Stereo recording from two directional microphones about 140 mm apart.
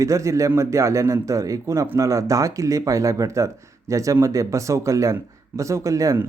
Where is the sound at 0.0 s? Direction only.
20° right (ahead or behind).